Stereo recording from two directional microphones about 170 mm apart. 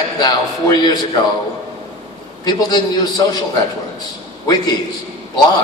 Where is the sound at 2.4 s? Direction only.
25° left (ahead or behind).